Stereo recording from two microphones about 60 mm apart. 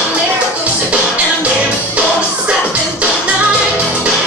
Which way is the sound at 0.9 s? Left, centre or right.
Right.